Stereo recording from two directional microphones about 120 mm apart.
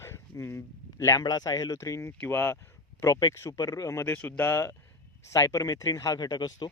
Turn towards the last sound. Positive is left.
turn(degrees=35)  # may be behind; listen again after turning